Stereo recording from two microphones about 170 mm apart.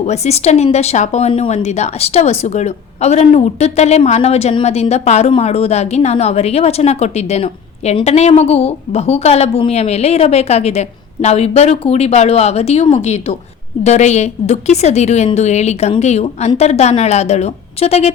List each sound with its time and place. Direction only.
0.0 s a woman's voice: 40° left (ahead or behind)